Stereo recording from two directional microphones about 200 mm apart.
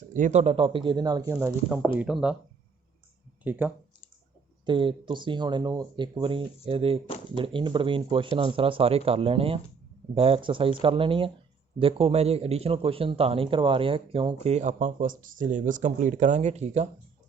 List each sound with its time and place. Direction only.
0.1 s speech: 40° right (ahead or behind); by 2.3 s 5° right (ahead or behind)
3.4 s speech: 10° right (ahead or behind)
4.6 s speech: 25° right (ahead or behind)